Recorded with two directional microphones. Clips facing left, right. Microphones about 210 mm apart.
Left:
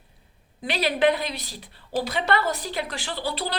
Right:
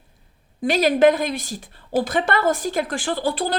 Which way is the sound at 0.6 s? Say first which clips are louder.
Right 7 dB; 45° right (ahead or behind).